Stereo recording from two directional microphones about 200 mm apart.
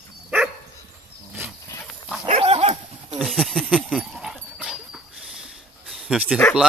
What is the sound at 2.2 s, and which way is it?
Dog, 30° right (ahead or behind).